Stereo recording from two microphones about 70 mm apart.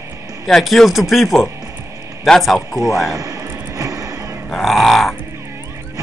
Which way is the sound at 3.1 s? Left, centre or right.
Right.